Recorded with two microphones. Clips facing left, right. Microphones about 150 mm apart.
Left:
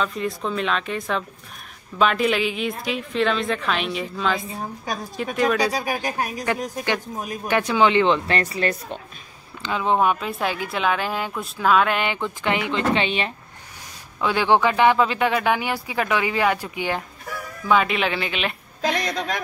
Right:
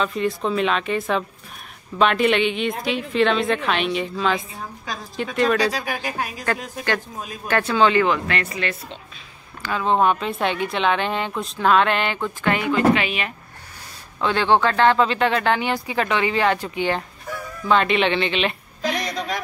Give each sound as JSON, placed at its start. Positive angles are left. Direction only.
{"t": 0.0, "sound": "a woman's voice", "side_deg": 0}
{"t": 9.6, "sound": "speech", "side_deg": 15}
{"t": 9.9, "sound": "a woman's voice", "side_deg": 5}
{"t": 14.2, "sound": "a woman's voice", "side_deg": 10}